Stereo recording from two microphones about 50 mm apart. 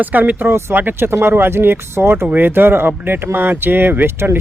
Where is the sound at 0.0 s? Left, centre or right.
Right.